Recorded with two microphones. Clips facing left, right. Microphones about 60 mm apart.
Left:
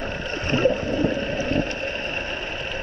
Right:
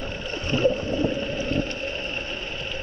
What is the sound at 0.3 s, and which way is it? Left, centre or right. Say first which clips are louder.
Rowboat: left 1 dB; left.